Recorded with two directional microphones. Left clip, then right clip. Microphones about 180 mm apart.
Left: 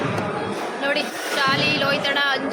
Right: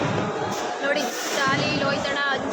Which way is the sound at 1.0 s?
25° left (ahead or behind).